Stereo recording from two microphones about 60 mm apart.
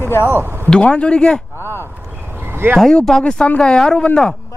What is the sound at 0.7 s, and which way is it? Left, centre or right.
Speech, centre.